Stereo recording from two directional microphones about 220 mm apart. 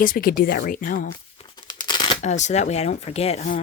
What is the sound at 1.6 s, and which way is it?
Tearing, 20° left (ahead or behind).